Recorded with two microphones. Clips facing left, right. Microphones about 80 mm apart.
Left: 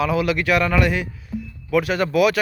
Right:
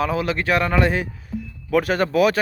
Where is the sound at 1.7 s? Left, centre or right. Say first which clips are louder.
Right 1 dB; right.